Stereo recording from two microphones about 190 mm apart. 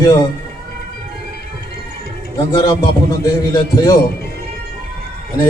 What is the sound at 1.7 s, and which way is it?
Music, 55° left (ahead or behind).